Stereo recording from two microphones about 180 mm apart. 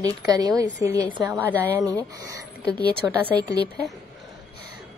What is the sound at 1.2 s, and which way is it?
Speech, 10° right (ahead or behind).